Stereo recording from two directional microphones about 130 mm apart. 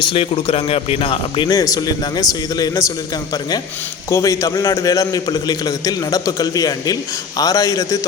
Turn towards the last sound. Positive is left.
turn(degrees=25)  # may be behind; listen again after turning